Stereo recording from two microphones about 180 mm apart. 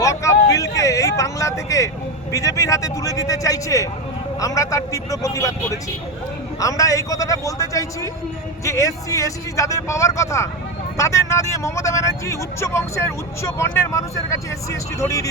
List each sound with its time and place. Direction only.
0.0 s a sound: 15° left (ahead or behind)
0.5 s vehicle: 20° left (ahead or behind)
2.3 s speech: 20° left (ahead or behind)